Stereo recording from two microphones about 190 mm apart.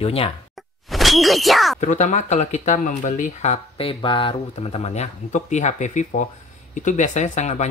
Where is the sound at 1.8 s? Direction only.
40° left (ahead or behind).